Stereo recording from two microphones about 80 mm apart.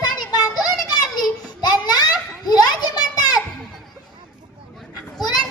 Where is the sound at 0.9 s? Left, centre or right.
Left.